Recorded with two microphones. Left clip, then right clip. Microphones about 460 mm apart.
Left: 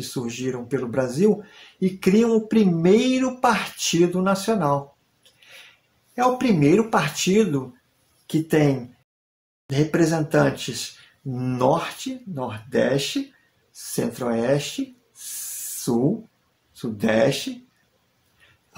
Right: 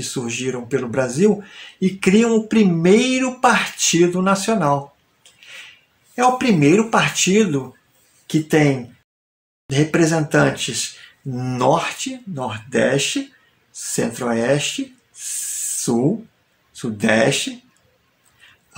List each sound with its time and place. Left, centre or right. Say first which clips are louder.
0.0 s speech: right 4 dB; left
6.1 s speech: right 4 dB; left
9.7 s speech: right 4 dB; left
15.9 s speech: right 3 dB; left